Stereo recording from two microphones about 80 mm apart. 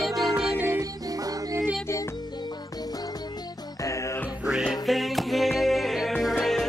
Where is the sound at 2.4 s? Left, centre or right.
Left.